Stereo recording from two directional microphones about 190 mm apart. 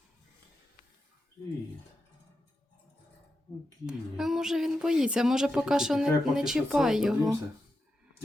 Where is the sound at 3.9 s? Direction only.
Centre (ahead or behind).